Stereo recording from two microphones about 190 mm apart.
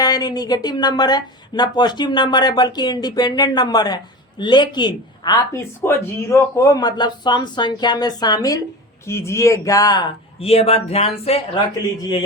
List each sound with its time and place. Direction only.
0.0 s speech: 20° left (ahead or behind)